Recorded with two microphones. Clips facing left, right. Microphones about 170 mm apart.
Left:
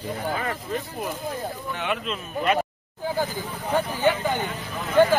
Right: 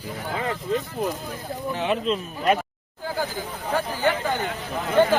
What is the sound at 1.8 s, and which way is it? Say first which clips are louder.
Speech: right 5 dB; 35° right (ahead or behind).